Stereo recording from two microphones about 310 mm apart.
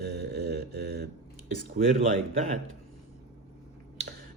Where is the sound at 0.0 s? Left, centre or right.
Right.